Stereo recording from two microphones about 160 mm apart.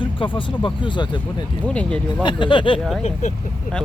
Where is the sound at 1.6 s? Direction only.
5° left (ahead or behind).